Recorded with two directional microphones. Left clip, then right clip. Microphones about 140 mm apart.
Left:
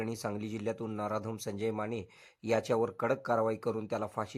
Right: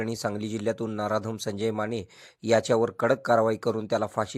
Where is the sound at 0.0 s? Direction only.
25° right (ahead or behind).